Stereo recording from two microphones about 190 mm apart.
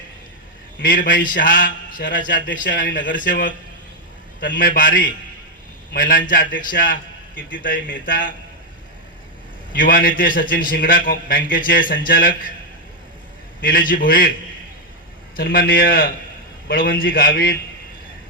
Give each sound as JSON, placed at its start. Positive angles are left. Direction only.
{"t": 0.8, "sound": "a man's voice", "side_deg": 45}
{"t": 9.7, "sound": "a man's voice", "side_deg": 50}
{"t": 13.6, "sound": "a man's voice", "side_deg": 50}
{"t": 15.4, "sound": "a man's voice", "side_deg": 50}